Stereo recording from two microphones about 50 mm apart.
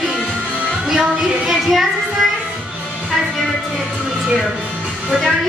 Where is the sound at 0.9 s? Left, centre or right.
Centre.